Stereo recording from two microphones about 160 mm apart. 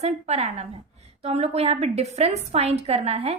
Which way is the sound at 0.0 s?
45° right (ahead or behind).